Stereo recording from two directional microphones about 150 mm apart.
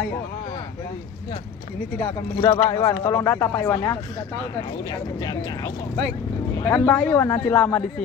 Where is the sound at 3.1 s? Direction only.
15° left (ahead or behind).